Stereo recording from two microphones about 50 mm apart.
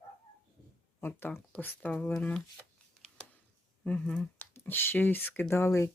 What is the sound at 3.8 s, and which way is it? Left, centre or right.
Speech, left.